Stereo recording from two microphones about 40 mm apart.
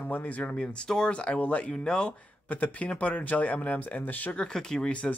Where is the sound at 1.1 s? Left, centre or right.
Left.